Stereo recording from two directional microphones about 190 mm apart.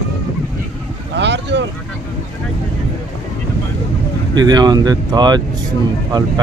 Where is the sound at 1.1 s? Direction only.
65° right (ahead or behind).